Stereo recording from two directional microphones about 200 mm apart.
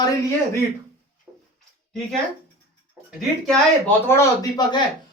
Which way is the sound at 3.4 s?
10° left (ahead or behind).